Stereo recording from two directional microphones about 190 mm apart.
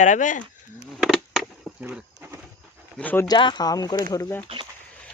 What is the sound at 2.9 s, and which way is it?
Speech, 10° left (ahead or behind).